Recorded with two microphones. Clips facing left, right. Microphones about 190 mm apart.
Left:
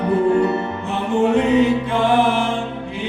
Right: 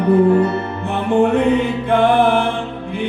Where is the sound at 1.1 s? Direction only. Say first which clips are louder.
Right 1 dB; 55° right (ahead or behind).